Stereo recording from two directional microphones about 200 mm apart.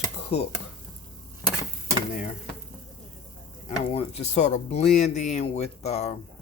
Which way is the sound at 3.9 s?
30° left (ahead or behind).